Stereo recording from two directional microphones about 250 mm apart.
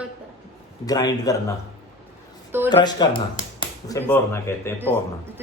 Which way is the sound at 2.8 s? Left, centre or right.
Centre.